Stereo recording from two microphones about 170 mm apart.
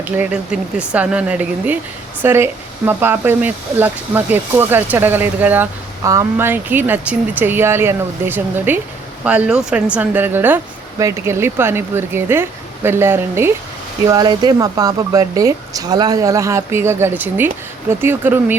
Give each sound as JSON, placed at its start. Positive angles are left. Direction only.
{"t": 0.0, "sound": "a woman's voice", "side_deg": -10}